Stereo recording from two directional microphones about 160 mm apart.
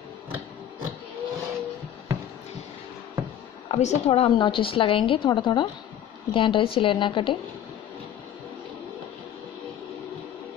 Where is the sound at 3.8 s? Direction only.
45° left (ahead or behind).